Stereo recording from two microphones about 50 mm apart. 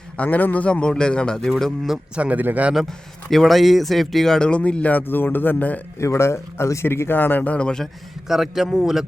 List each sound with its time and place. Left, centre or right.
0.2 s speech: left; by 1.9 s centre
2.1 s speech: right
2.4 s speech: right
3.2 s speech: centre; by 5.8 s left
6.0 s speech: left
6.8 s speech: left
7.2 s speech: left
7.5 s a man's voice: centre
8.3 s a man's voice: centre